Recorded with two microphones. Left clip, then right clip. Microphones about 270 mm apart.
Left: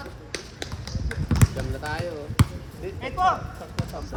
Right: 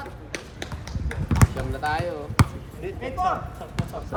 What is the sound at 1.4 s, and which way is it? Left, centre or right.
Basketball bounce, centre.